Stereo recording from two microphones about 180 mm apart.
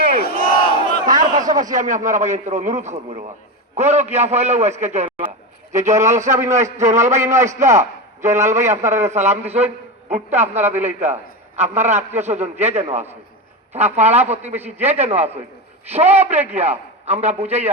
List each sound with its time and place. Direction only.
0.2 s battle cry: 55° left (ahead or behind)
1.0 s a sound: 20° right (ahead or behind)
1.5 s speech: 20° right (ahead or behind)
1.7 s a man's voice: 45° right (ahead or behind)
5.9 s a man's voice: 15° right (ahead or behind)
9.4 s a man's voice: 35° right (ahead or behind)
10.5 s a man's voice: 10° right (ahead or behind)
10.8 s a man's voice: 40° right (ahead or behind)